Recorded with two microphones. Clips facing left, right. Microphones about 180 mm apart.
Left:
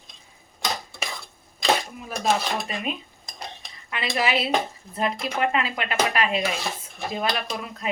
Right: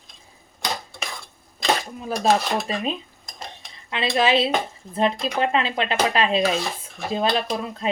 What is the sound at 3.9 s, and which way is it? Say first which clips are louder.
Speech: right 5 dB; 25° right (ahead or behind).